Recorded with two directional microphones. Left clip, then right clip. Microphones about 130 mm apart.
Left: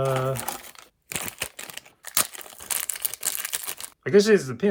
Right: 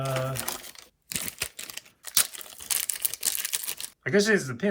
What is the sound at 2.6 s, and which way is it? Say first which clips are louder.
Crumpling: even; 25° left (ahead or behind).